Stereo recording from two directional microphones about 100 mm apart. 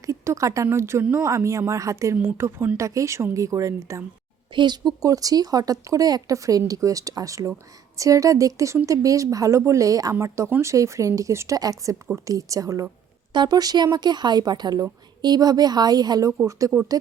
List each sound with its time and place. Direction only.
0.0 s speech: 35° right (ahead or behind)
4.5 s speech: 50° right (ahead or behind)
5.0 s speech: 35° right (ahead or behind)
13.3 s speech: 45° right (ahead or behind)